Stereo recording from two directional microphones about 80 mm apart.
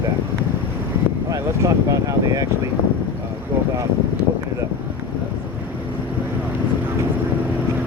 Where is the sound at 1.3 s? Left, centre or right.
Right.